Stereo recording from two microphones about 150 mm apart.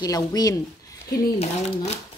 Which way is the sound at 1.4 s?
45° left (ahead or behind).